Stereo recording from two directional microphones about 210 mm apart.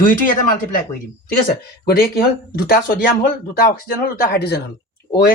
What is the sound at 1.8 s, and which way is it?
Speech, 45° left (ahead or behind).